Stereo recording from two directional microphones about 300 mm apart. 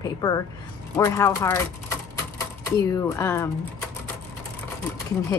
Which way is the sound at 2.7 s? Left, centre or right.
Centre.